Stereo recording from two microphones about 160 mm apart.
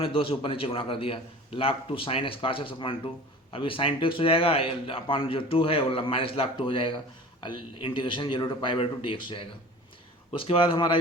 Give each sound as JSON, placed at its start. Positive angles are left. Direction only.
{"t": 0.0, "sound": "a man's voice", "side_deg": 35}